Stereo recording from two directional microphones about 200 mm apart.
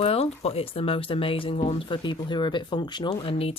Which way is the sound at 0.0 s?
30° left (ahead or behind).